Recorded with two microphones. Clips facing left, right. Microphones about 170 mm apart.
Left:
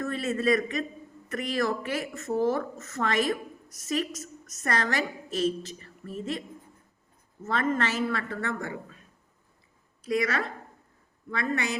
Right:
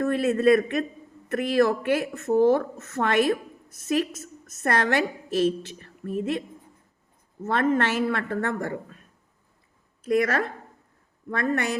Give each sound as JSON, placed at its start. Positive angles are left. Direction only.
{"t": 0.0, "sound": "a man's voice", "side_deg": -60}
{"t": 7.4, "sound": "a woman's voice", "side_deg": -60}
{"t": 10.1, "sound": "a woman's voice", "side_deg": -55}